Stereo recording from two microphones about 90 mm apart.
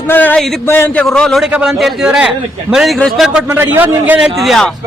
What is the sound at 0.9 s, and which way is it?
Speech, 10° left (ahead or behind).